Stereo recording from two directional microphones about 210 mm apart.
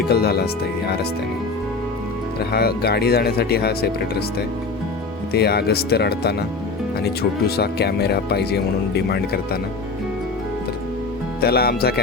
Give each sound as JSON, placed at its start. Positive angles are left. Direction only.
{"t": 0.1, "sound": "speech", "side_deg": 45}
{"t": 2.5, "sound": "speech", "side_deg": 50}
{"t": 11.3, "sound": "speech", "side_deg": 50}